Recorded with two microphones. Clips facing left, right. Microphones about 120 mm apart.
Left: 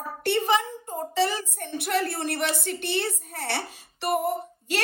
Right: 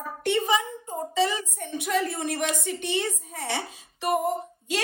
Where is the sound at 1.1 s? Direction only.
60° left (ahead or behind).